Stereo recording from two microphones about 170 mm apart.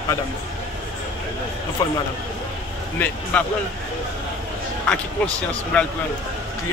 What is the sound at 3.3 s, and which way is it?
Speech, 5° left (ahead or behind).